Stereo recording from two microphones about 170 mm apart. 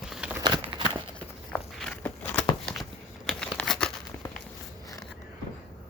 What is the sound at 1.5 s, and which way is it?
Walk, 5° left (ahead or behind).